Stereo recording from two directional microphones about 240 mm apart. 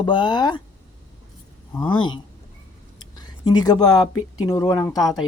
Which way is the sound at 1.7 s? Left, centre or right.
Centre.